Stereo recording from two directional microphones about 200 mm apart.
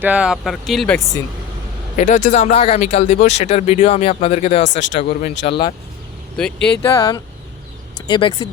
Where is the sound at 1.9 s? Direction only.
35° left (ahead or behind).